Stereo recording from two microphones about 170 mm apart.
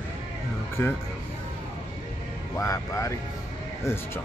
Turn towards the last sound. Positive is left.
turn(degrees=15)  # may be behind; listen again after turning